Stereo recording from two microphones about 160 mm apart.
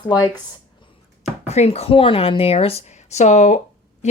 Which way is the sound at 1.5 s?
40° left (ahead or behind).